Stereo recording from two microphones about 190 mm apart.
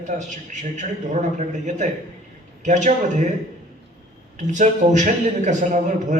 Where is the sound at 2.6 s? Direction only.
40° right (ahead or behind).